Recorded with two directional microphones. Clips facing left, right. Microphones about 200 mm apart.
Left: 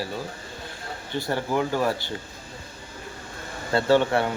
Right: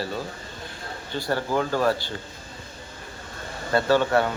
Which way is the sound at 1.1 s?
20° left (ahead or behind).